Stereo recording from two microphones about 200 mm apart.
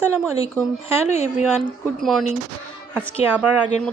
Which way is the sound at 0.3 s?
15° right (ahead or behind).